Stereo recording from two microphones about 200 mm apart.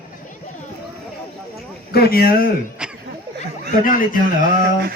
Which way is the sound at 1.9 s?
50° left (ahead or behind).